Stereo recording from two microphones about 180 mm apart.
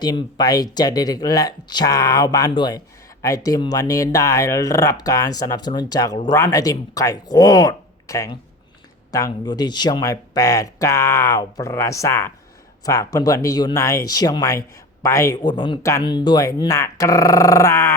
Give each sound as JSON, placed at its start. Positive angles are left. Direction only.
{"t": 0.0, "sound": "speech", "side_deg": 25}